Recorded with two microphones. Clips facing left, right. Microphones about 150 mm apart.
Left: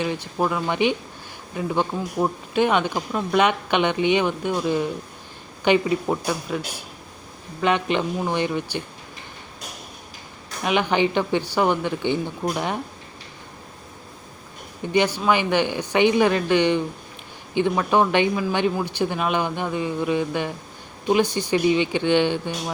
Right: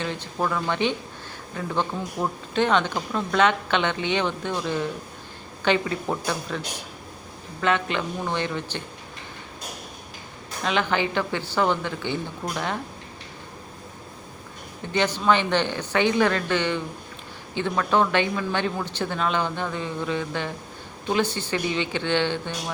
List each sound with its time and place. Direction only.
0.0 s speech: 10° left (ahead or behind)
10.6 s speech: 15° left (ahead or behind)
14.9 s speech: 10° left (ahead or behind)